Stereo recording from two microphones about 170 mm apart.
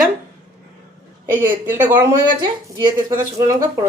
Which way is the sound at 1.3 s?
10° right (ahead or behind).